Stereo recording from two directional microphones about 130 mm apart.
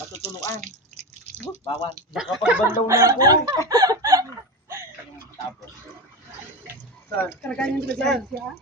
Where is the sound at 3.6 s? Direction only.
30° right (ahead or behind).